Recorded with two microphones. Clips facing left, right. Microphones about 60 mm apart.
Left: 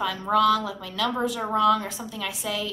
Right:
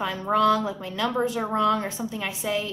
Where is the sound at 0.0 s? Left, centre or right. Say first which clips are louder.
Even; right.